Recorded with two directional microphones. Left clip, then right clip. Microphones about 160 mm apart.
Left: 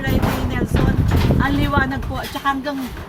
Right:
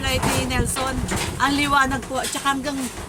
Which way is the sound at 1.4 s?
20° right (ahead or behind).